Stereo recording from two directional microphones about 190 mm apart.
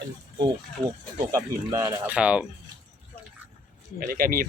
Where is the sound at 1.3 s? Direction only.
15° right (ahead or behind).